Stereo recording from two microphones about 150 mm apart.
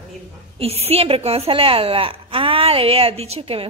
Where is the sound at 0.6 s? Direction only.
40° right (ahead or behind).